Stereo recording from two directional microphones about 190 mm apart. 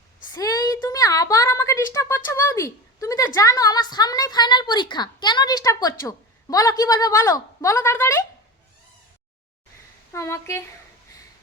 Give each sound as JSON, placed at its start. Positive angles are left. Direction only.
{"t": 0.3, "sound": "speech", "side_deg": 20}
{"t": 10.1, "sound": "a woman's voice", "side_deg": 15}